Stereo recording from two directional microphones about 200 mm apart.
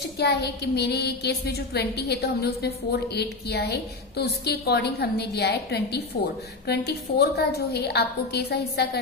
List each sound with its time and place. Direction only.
0.2 s a woman's voice: 55° left (ahead or behind)